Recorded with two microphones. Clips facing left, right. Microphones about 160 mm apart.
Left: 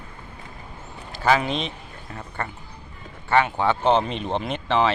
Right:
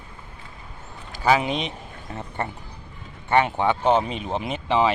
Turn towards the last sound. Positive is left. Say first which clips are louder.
# even
turn(degrees=-10)  # may be behind; listen again after turning